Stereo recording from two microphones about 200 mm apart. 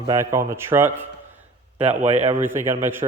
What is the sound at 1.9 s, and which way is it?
Speech, 35° right (ahead or behind).